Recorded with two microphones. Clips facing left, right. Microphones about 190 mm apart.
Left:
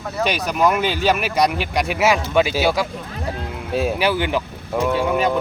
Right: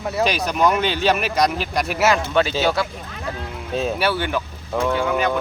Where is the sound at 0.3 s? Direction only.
Centre (ahead or behind).